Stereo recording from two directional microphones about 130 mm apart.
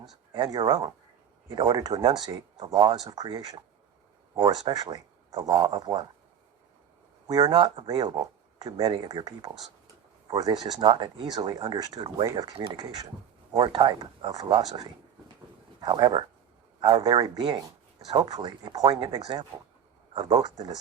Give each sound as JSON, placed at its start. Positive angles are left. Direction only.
{"t": 0.3, "sound": "speech", "side_deg": -30}
{"t": 7.3, "sound": "speech", "side_deg": -30}
{"t": 13.5, "sound": "speech", "side_deg": -40}
{"t": 14.0, "sound": "speech", "side_deg": -30}
{"t": 20.4, "sound": "speech", "side_deg": -30}